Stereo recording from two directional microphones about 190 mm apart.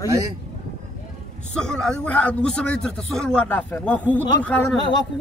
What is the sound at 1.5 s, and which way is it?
A man's voice, 5° left (ahead or behind).